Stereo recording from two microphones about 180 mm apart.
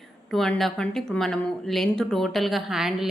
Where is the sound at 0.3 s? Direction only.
Centre (ahead or behind).